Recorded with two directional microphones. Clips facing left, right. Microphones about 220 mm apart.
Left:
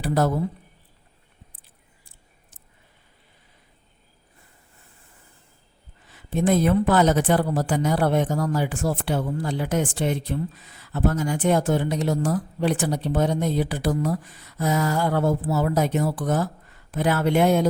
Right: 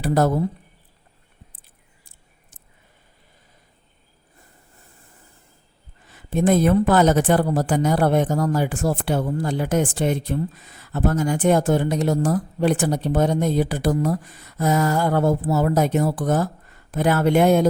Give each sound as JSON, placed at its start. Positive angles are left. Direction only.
{"t": 0.0, "sound": "a man's voice", "side_deg": -45}
{"t": 6.1, "sound": "speech", "side_deg": -45}